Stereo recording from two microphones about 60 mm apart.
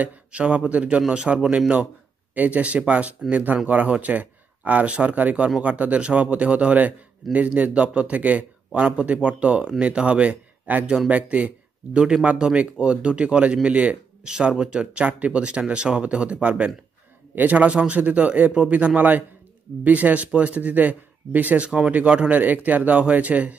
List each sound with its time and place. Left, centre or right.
0.0 s speech: right
21.6 s speech: centre